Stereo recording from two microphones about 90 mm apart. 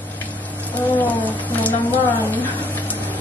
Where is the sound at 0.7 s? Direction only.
20° left (ahead or behind).